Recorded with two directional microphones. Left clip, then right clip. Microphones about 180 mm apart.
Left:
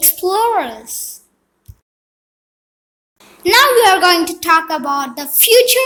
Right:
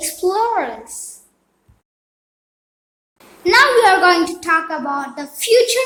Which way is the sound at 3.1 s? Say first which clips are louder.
Left 1 dB; 40° left (ahead or behind).